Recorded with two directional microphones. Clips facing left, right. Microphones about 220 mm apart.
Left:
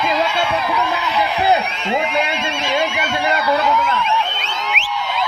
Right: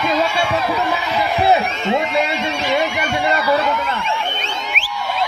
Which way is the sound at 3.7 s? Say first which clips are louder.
Left 2 dB; 50° right (ahead or behind).